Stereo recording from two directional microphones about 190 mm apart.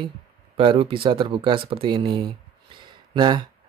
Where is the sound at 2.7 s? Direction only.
25° right (ahead or behind).